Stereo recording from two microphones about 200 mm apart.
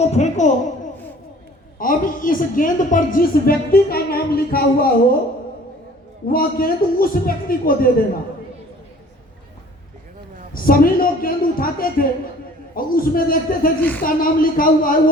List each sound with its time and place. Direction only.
0.0 s a woman's voice: 35° left (ahead or behind)
1.8 s a woman's voice: 45° left (ahead or behind)
6.2 s a woman's voice: 45° left (ahead or behind)
10.5 s a woman's voice: 45° left (ahead or behind)